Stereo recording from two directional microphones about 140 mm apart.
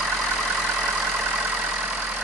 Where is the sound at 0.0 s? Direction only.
Centre (ahead or behind).